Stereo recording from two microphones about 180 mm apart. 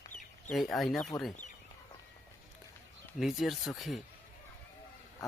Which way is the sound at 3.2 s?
Centre (ahead or behind).